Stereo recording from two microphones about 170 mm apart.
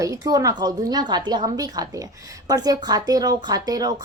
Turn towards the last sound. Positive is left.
turn(degrees=-20)  # may be behind; listen again after turning